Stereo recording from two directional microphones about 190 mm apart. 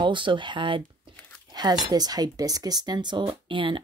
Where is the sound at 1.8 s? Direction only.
20° right (ahead or behind).